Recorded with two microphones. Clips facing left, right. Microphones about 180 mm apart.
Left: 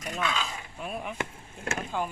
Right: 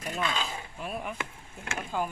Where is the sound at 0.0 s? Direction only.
30° right (ahead or behind).